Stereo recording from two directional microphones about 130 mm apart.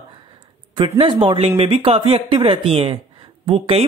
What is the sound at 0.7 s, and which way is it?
Speech, 45° right (ahead or behind).